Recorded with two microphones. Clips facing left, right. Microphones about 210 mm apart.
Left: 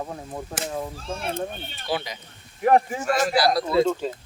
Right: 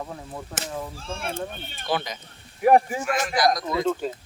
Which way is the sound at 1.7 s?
50° right (ahead or behind).